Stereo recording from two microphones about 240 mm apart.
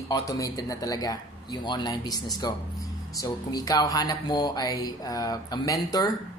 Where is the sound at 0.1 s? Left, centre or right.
Centre.